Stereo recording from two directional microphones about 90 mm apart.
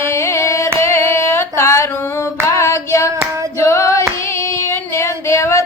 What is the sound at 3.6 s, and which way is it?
Singing, 30° left (ahead or behind).